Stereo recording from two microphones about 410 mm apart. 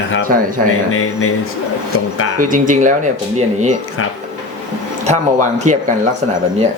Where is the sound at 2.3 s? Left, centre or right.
Centre.